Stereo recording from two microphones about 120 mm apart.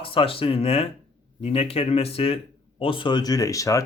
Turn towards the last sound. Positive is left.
turn(degrees=30)  # may be behind; listen again after turning